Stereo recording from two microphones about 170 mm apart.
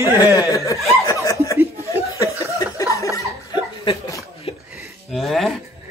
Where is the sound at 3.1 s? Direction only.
20° left (ahead or behind).